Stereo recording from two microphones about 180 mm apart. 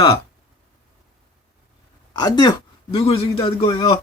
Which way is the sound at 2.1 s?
20° left (ahead or behind).